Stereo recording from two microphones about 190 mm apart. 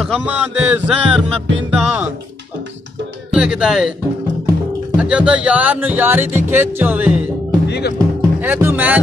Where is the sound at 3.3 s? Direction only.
5° right (ahead or behind).